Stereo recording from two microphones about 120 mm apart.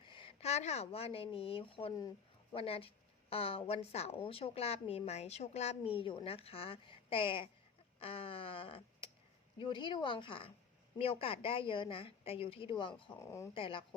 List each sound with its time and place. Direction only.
0.0 s a woman's voice: 45° left (ahead or behind)
7.9 s a sound: 50° left (ahead or behind)
9.6 s speech: 45° left (ahead or behind)
13.1 s speech: 20° left (ahead or behind)
13.5 s speech: 45° left (ahead or behind)